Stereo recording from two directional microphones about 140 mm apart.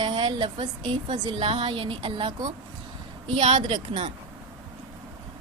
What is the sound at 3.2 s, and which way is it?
Speech, 50° right (ahead or behind).